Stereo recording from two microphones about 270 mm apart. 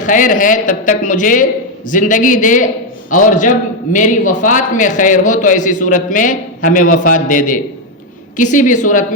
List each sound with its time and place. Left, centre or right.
0.0 s a man's voice: left